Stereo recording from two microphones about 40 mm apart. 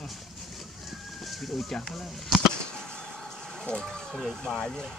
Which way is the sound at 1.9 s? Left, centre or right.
Centre.